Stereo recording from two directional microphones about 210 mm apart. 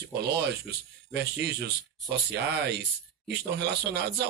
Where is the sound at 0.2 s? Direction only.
50° right (ahead or behind).